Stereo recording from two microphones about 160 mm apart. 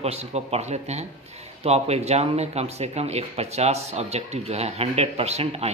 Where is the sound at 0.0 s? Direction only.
40° right (ahead or behind).